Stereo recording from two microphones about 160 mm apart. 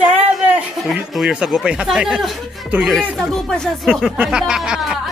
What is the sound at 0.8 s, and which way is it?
Speech, centre (ahead or behind).